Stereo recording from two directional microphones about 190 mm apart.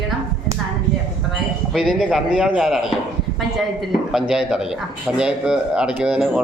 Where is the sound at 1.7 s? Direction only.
Centre (ahead or behind).